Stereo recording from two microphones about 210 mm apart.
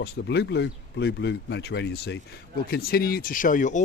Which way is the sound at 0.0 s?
55° left (ahead or behind).